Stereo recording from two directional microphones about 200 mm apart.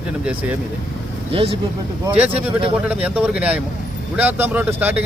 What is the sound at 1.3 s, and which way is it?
Speech, 25° right (ahead or behind).